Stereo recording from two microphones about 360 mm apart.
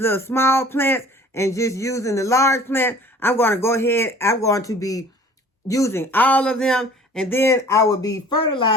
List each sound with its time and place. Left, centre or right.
0.0 s speech: centre